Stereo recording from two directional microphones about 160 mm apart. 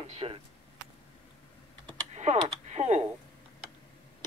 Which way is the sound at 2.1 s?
45° right (ahead or behind).